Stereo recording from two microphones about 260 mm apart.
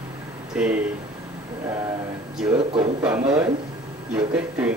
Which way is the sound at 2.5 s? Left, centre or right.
Centre.